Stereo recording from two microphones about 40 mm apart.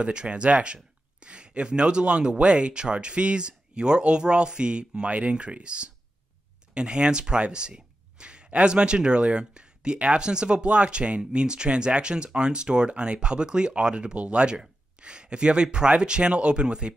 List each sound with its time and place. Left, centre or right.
0.0 s speech: right